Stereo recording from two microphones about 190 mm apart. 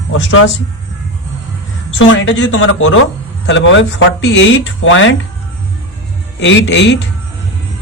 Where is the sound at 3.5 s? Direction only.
75° left (ahead or behind); by 5.2 s 90° left.